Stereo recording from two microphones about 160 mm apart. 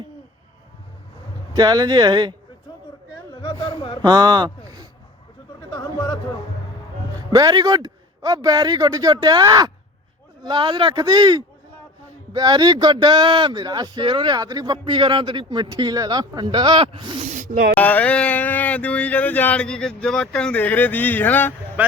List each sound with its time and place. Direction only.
1.5 s speech: 25° right (ahead or behind)
4.0 s speech: 25° right (ahead or behind)
5.7 s a sound: 25° left (ahead or behind)
7.2 s speech: 25° right (ahead or behind)
17.2 s speech: 50° right (ahead or behind)
17.7 s speech: 10° left (ahead or behind)
21.8 s speech: 10° right (ahead or behind)